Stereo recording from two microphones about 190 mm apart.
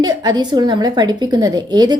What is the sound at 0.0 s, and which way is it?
A woman's voice, 20° right (ahead or behind).